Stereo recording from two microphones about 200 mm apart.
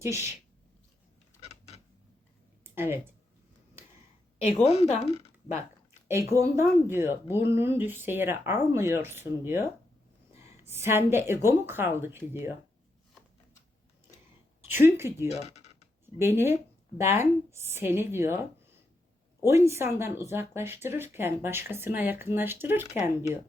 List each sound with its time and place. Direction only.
0.0 s speech: 15° right (ahead or behind)
1.5 s a sound: 30° left (ahead or behind)
2.7 s speech: 10° right (ahead or behind)
4.4 s speech: 30° left (ahead or behind)
6.1 s speech: 15° right (ahead or behind)
14.7 s speech: 10° right (ahead or behind)
15.3 s a sound: 35° left (ahead or behind)
16.1 s speech: 10° right (ahead or behind)